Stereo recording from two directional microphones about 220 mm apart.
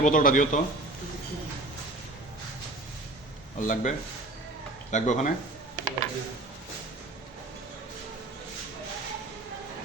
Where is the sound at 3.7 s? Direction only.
35° left (ahead or behind).